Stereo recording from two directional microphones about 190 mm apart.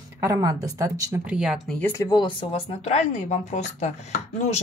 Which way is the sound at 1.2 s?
5° right (ahead or behind).